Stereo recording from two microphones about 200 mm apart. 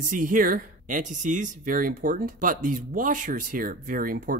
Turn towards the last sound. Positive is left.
turn(degrees=-45)  # may be behind; listen again after turning